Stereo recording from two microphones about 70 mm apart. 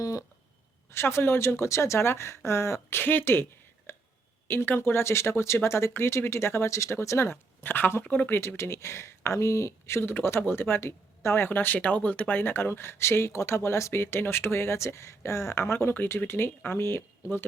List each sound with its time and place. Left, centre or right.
0.0 s a sound: left
0.9 s speech: left
3.9 s a sound: left
4.4 s speech: left
8.4 s speech: left
11.8 s speech: centre